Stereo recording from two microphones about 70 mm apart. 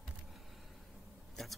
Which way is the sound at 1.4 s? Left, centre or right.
Centre.